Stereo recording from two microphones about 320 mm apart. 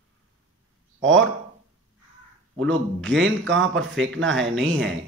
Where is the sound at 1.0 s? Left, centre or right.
Right.